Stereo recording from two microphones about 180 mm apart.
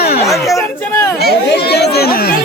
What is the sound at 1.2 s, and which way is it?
Chatter, 65° left (ahead or behind).